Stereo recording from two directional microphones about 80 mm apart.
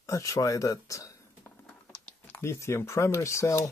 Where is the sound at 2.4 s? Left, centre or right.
Left.